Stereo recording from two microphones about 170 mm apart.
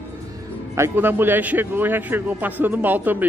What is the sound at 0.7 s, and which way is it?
Speech, 15° right (ahead or behind).